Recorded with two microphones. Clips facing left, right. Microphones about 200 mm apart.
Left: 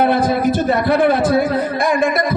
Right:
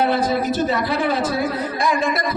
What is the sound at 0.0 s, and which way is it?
A man's voice, 55° left (ahead or behind).